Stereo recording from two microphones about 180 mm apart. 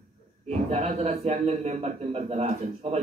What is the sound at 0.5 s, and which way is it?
A man's voice, 40° right (ahead or behind).